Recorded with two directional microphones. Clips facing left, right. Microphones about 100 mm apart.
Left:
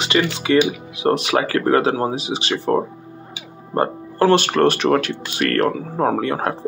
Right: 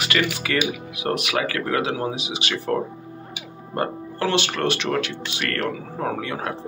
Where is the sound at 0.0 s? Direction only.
25° left (ahead or behind).